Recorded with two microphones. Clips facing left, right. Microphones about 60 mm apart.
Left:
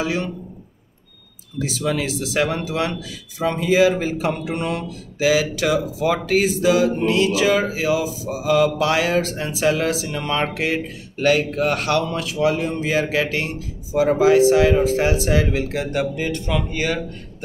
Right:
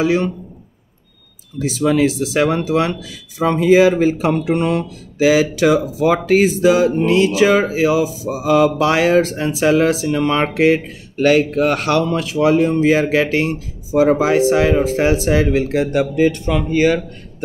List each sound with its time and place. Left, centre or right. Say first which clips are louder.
0.0 s speech: right 7 dB; right
1.7 s speech: right 9 dB; right